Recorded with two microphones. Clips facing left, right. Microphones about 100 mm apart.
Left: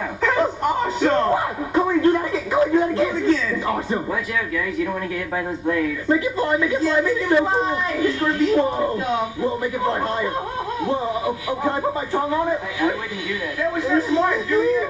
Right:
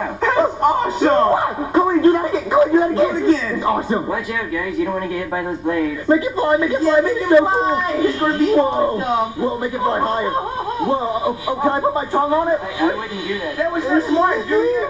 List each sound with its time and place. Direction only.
0.2 s music: 30° right (ahead or behind)
5.7 s speech: 30° right (ahead or behind)